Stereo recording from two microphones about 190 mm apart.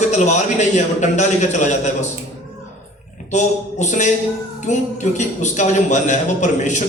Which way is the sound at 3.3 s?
40° left (ahead or behind).